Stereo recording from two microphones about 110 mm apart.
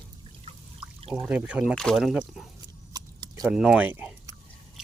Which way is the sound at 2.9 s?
35° right (ahead or behind).